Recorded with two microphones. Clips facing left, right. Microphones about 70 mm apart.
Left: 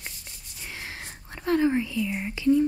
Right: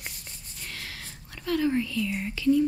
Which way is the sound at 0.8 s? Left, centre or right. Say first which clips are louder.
Left 3 dB; left.